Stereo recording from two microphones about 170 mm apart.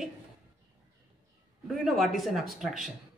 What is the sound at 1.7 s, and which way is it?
Speech, centre (ahead or behind).